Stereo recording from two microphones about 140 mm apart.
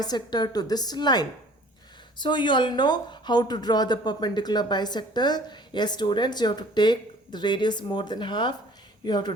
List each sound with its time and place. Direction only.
0.0 s a woman's voice: 30° left (ahead or behind)